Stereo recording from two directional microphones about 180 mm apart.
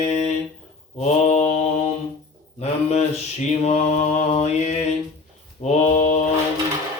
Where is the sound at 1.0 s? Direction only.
40° left (ahead or behind).